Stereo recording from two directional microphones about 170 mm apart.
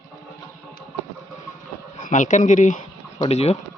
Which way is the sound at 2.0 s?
50° left (ahead or behind).